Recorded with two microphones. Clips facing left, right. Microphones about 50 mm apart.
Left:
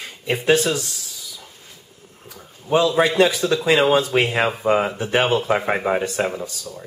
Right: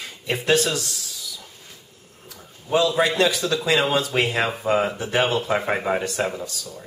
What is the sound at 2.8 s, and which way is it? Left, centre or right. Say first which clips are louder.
Speech: left 3 dB; centre.